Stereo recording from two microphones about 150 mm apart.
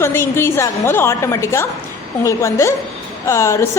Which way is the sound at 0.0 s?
15° left (ahead or behind).